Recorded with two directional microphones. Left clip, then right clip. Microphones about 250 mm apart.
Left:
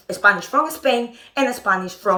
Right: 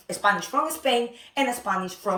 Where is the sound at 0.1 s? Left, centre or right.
Centre.